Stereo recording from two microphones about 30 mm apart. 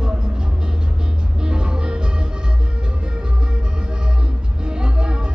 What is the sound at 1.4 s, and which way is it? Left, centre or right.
Music, right.